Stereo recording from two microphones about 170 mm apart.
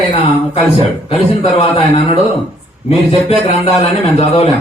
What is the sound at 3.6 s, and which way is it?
Speech, 40° left (ahead or behind).